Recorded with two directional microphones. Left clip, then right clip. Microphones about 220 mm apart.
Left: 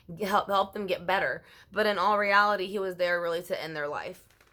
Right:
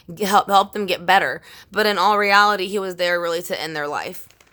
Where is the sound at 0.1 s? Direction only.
40° right (ahead or behind).